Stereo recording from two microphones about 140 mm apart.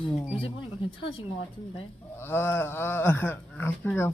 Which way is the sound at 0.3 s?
40° left (ahead or behind).